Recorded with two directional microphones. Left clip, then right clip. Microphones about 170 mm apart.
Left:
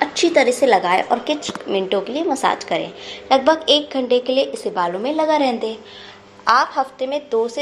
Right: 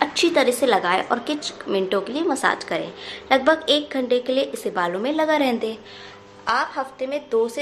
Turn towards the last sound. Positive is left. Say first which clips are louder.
# left 2 dB
turn(degrees=5)  # may be behind; listen again after turning